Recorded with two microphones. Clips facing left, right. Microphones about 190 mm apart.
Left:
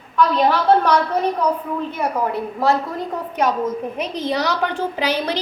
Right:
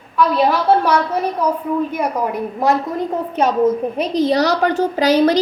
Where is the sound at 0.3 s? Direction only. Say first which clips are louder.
Right 1 dB; 5° right (ahead or behind).